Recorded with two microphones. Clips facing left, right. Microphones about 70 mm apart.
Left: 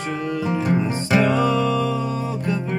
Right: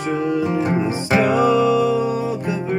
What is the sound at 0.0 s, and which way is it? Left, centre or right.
Music, centre.